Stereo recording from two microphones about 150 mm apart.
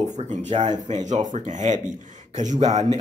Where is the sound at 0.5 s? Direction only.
35° right (ahead or behind).